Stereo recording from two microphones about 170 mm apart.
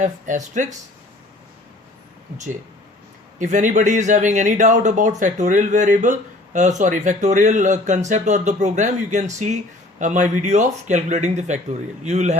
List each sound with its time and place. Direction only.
0.0 s speech: 45° right (ahead or behind)
3.3 s speech: 45° right (ahead or behind)